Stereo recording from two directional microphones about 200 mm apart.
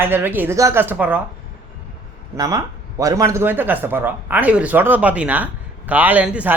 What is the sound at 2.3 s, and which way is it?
Speech, 15° right (ahead or behind).